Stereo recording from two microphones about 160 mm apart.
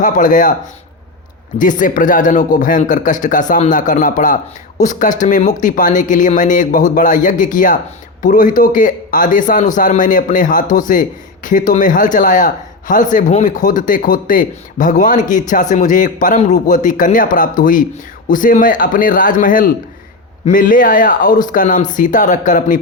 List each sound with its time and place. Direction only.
0.0 s a man's voice: 55° left (ahead or behind)
1.5 s a man's voice: 55° left (ahead or behind)